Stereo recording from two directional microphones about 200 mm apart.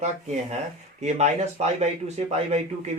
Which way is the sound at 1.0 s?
35° right (ahead or behind).